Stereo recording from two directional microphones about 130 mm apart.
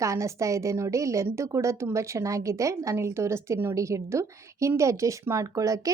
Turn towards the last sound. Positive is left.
turn(degrees=-25)  # may be behind; listen again after turning